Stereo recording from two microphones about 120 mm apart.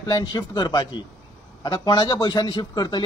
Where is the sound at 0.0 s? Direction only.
35° left (ahead or behind).